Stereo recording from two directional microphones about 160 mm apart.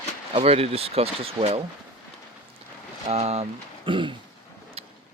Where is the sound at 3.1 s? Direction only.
40° right (ahead or behind).